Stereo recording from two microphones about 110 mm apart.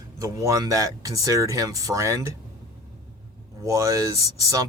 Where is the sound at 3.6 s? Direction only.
30° right (ahead or behind).